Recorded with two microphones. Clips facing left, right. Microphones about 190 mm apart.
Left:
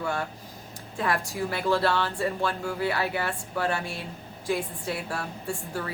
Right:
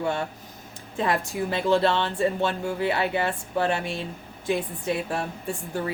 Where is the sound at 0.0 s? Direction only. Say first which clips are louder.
Right 3 dB; 25° right (ahead or behind).